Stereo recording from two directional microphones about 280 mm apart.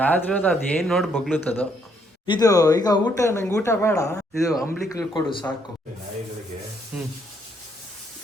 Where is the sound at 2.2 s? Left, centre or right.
Centre.